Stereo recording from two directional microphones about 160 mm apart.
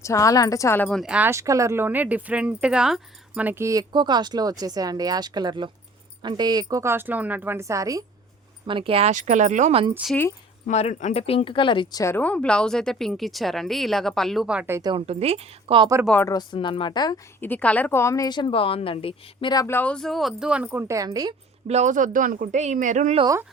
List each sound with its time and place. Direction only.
0.0 s a woman's voice: 20° left (ahead or behind)
0.9 s speech: centre (ahead or behind); by 8.0 s 20° right (ahead or behind)
8.6 s speech: 35° right (ahead or behind)
9.9 s speech: 5° right (ahead or behind)
10.7 s speech: 45° left (ahead or behind); by 14.8 s 5° right (ahead or behind)
14.8 s speech: 25° right (ahead or behind)
15.0 s a woman's voice: 40° right (ahead or behind)
16.2 s a woman's voice: 25° left (ahead or behind)
17.4 s a woman's voice: 10° left (ahead or behind); by 19.6 s 30° left (ahead or behind)
19.6 s a woman's voice: 10° left (ahead or behind); by 21.3 s 25° right (ahead or behind)
21.7 s speech: 45° right (ahead or behind)